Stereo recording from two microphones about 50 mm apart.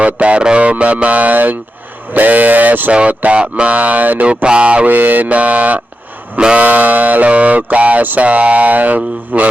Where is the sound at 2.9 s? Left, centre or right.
Right.